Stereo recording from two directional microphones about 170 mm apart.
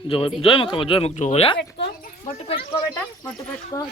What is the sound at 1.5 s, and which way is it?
Speech, 80° left.